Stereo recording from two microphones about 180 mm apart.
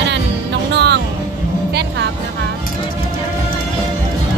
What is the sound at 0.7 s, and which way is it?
Music, 70° right (ahead or behind).